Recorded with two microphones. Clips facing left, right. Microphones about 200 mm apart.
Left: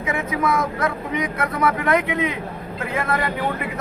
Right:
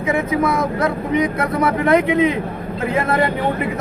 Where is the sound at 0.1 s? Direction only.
30° right (ahead or behind).